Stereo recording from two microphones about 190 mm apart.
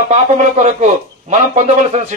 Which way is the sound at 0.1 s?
40° right (ahead or behind).